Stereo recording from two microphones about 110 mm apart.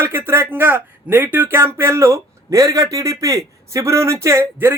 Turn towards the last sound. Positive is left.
turn(degrees=-25)  # may be behind; listen again after turning